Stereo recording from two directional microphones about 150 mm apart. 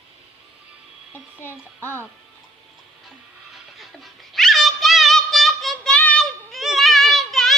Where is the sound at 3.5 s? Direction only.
Centre (ahead or behind).